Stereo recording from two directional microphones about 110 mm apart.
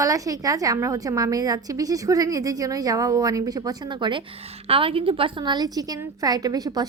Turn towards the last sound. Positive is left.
turn(degrees=-35)  # may be behind; listen again after turning